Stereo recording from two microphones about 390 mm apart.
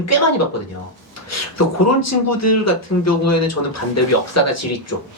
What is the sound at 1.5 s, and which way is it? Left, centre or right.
Speech, left.